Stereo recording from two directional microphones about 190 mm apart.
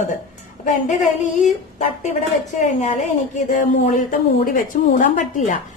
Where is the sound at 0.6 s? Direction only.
40° left (ahead or behind).